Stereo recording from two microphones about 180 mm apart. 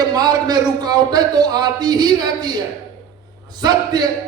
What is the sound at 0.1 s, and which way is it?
A man's voice, 20° right (ahead or behind).